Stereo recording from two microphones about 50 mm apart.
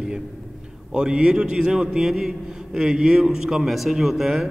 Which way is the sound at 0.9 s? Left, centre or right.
Centre.